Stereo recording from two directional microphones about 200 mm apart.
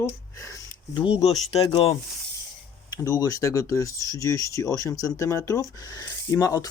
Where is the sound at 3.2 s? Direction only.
15° left (ahead or behind).